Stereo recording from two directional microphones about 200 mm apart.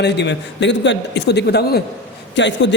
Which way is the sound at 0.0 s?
60° left (ahead or behind).